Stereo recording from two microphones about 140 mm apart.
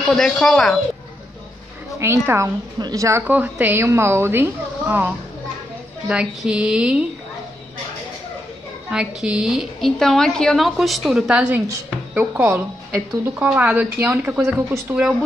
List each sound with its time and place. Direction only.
0.1 s a woman's voice: 5° left (ahead or behind)
2.0 s a woman's voice: 20° right (ahead or behind)
8.9 s a woman's voice: 5° right (ahead or behind)